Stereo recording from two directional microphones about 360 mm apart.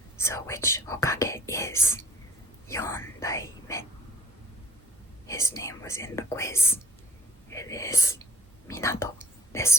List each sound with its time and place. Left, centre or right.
0.2 s speech: centre
5.2 s speech: centre